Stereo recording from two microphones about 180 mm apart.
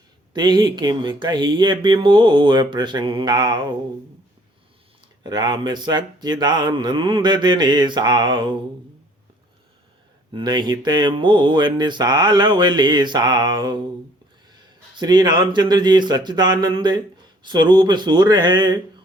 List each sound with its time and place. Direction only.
0.3 s mantra: 25° right (ahead or behind)
5.2 s mantra: 25° right (ahead or behind)
10.3 s mantra: 25° right (ahead or behind)
14.9 s mantra: 25° right (ahead or behind)